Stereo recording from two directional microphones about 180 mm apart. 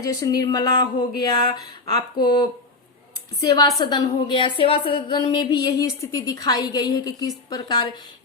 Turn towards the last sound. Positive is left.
turn(degrees=25)  # may be behind; listen again after turning